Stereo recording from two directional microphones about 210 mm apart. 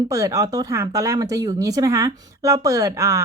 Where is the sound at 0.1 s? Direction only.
15° right (ahead or behind).